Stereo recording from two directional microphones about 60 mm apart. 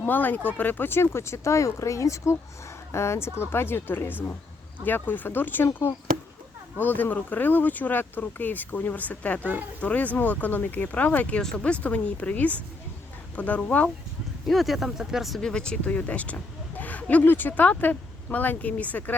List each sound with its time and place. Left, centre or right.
0.0 s speech: left
2.9 s a woman's voice: left
6.7 s speech: left
14.4 s speech: centre
15.4 s speech: centre
15.8 s speech: left